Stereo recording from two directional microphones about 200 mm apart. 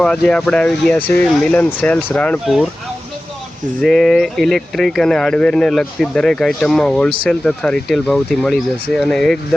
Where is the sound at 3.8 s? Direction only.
Centre (ahead or behind).